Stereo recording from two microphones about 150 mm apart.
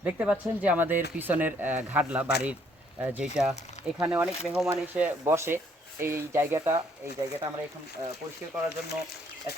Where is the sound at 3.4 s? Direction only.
5° right (ahead or behind).